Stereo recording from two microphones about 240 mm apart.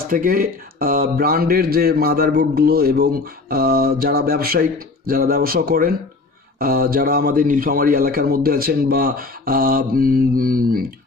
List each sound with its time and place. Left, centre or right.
0.1 s speech: right